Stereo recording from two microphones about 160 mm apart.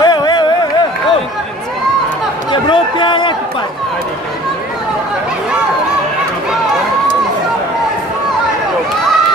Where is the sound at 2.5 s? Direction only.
30° left (ahead or behind).